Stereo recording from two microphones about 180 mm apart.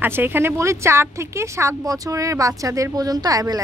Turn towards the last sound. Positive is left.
turn(degrees=-20)  # may be behind; listen again after turning